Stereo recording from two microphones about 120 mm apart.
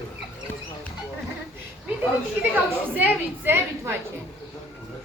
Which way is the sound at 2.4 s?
15° right (ahead or behind).